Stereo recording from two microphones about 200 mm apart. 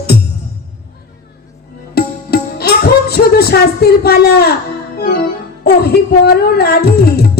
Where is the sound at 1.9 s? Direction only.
50° left (ahead or behind).